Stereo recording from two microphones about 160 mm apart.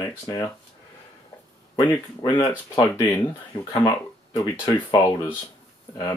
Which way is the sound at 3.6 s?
25° left (ahead or behind).